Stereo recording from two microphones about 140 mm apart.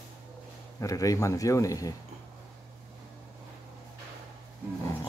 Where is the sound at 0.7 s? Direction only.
25° left (ahead or behind).